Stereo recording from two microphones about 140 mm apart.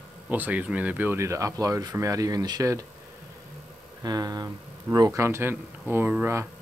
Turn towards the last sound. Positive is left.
turn(degrees=-15)  # may be behind; listen again after turning